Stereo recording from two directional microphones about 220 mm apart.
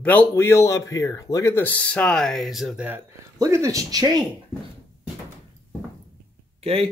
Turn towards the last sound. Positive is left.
turn(degrees=-25)  # may be behind; listen again after turning